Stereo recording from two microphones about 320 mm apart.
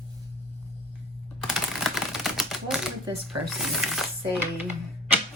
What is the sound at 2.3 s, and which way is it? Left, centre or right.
Typewriter, centre.